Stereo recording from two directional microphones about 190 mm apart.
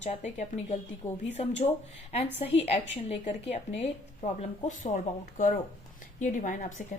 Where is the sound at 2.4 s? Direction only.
35° left (ahead or behind).